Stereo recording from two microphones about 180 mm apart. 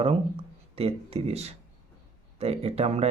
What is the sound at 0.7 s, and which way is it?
Speech, 35° right (ahead or behind).